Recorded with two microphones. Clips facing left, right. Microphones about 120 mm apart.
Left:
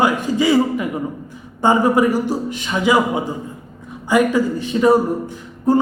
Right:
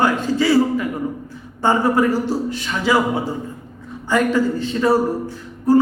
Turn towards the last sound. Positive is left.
turn(degrees=20)  # may be behind; listen again after turning